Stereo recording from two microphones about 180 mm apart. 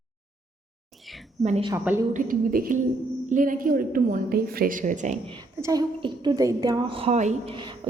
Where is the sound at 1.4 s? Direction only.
40° right (ahead or behind).